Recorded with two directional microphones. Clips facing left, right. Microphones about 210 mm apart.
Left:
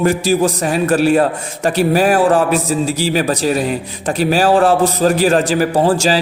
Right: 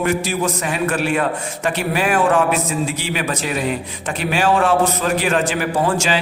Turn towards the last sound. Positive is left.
turn(degrees=35)  # may be behind; listen again after turning